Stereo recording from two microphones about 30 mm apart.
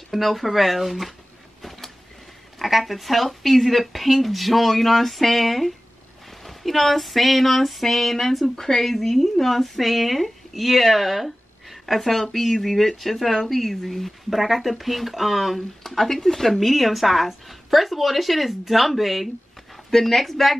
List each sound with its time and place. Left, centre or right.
0.1 s speech: centre
1.6 s a sound: centre
2.6 s speech: centre
8.5 s speech: centre
8.8 s speech: centre
15.9 s speech: centre
19.9 s speech: centre